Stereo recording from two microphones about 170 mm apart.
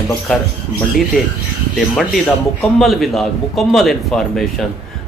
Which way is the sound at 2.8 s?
Centre (ahead or behind).